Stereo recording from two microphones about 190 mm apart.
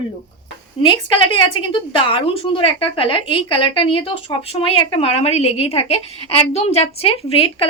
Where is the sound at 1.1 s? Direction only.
25° left (ahead or behind).